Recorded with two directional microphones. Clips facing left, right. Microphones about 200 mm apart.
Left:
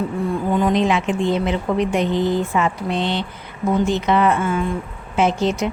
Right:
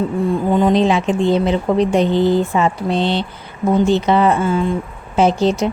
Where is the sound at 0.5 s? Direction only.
30° right (ahead or behind).